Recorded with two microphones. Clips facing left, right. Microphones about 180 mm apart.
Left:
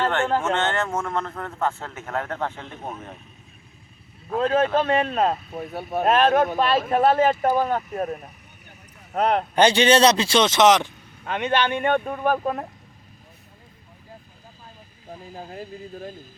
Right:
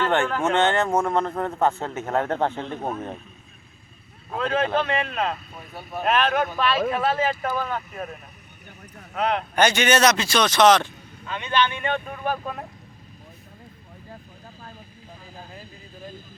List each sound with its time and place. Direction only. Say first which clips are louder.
0.4 s a man's voice: right 3 dB; 15° right (ahead or behind); by 2.9 s 30° right (ahead or behind)
4.4 s speech: left 3 dB; 40° left (ahead or behind)
5.5 s speech: left 7 dB; 55° left (ahead or behind)
9.6 s a man's voice: left 3 dB; 30° left (ahead or behind)
11.3 s speech: left 2 dB; 65° left (ahead or behind); by 12.6 s 45° left (ahead or behind)